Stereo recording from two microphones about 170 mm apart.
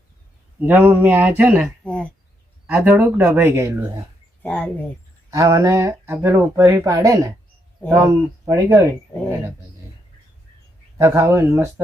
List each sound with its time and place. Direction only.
0.6 s speech: 10° right (ahead or behind)
1.8 s speech: 10° left (ahead or behind)
2.6 s speech: 5° right (ahead or behind)
4.4 s speech: 10° left (ahead or behind)
5.3 s speech: 20° right (ahead or behind)
10.9 s speech: 15° right (ahead or behind)